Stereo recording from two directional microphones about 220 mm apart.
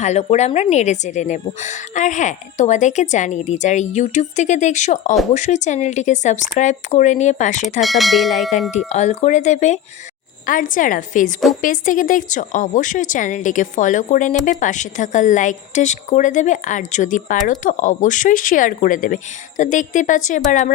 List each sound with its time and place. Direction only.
0.0 s a woman's voice: 30° left (ahead or behind)
7.8 s bell: centre (ahead or behind)
8.9 s a woman's voice: 30° left (ahead or behind)